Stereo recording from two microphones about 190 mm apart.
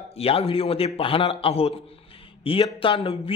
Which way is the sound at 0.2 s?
30° left (ahead or behind).